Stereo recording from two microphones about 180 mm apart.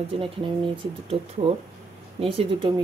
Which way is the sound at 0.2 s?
30° right (ahead or behind).